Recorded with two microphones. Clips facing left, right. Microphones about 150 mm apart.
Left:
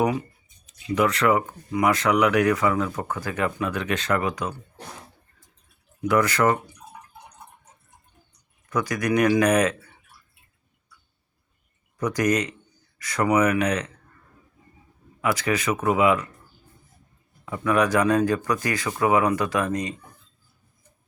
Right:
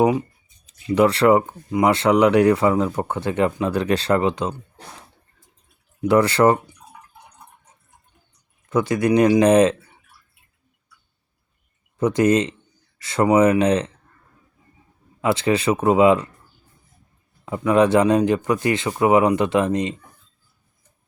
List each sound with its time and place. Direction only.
0.7 s speech: 30° right (ahead or behind)
6.1 s speech: 30° right (ahead or behind)
8.7 s speech: 25° right (ahead or behind)
11.9 s speech: 25° right (ahead or behind)
15.2 s speech: 25° right (ahead or behind)
17.4 s speech: 25° right (ahead or behind)